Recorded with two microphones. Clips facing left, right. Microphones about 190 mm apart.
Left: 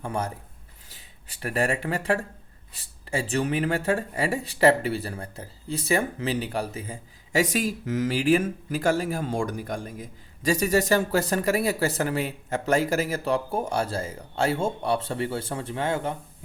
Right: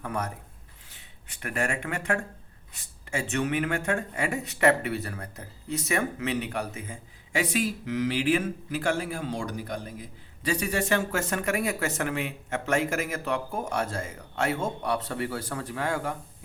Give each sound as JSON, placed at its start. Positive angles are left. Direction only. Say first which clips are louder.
{"t": 0.0, "sound": "speech", "louder": "left 2 dB", "side_deg": 30}